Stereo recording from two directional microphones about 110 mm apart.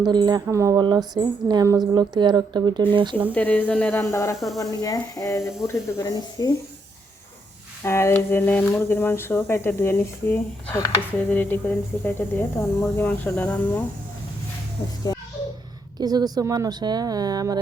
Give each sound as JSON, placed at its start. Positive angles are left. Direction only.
{"t": 0.0, "sound": "a woman's voice", "side_deg": -40}
{"t": 0.4, "sound": "speech", "side_deg": -30}
{"t": 0.8, "sound": "a woman's voice", "side_deg": -40}
{"t": 1.9, "sound": "a woman's voice", "side_deg": -40}
{"t": 3.3, "sound": "speech", "side_deg": 15}
{"t": 4.0, "sound": "speech", "side_deg": 25}
{"t": 4.4, "sound": "speech", "side_deg": 0}
{"t": 4.8, "sound": "speech", "side_deg": 35}
{"t": 7.9, "sound": "speech", "side_deg": 25}
{"t": 15.1, "sound": "a sound", "side_deg": 35}
{"t": 16.0, "sound": "a woman's voice", "side_deg": -40}